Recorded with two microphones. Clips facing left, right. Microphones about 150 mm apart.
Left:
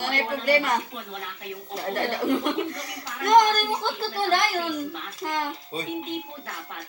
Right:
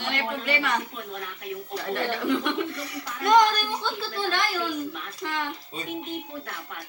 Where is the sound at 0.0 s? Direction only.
40° left (ahead or behind).